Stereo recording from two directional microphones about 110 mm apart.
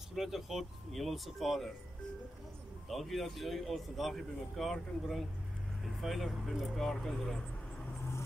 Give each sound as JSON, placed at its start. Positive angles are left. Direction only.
{"t": 0.1, "sound": "speech", "side_deg": 0}
{"t": 2.9, "sound": "speech", "side_deg": 0}